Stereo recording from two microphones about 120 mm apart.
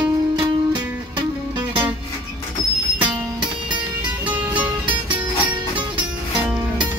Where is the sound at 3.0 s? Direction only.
40° right (ahead or behind).